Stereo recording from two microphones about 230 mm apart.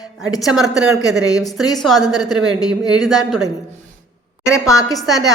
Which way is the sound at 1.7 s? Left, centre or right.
Centre.